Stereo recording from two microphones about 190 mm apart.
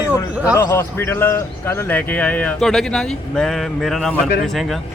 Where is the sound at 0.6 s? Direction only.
15° left (ahead or behind).